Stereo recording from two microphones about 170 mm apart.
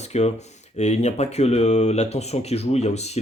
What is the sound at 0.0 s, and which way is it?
Speech, 40° left (ahead or behind).